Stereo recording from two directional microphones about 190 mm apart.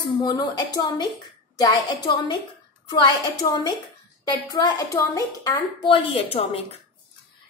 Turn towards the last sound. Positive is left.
turn(degrees=30)  # may be behind; listen again after turning